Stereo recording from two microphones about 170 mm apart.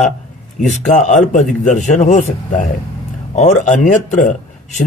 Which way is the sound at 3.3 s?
45° left (ahead or behind).